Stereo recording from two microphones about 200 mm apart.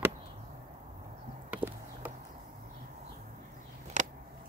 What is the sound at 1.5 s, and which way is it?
Horse, 10° right (ahead or behind).